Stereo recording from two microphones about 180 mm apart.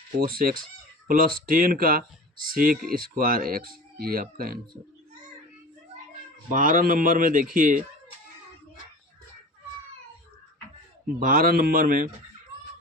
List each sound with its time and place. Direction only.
0.2 s speech: 55° right (ahead or behind)
6.5 s speech: 50° right (ahead or behind)
11.2 s speech: 50° right (ahead or behind)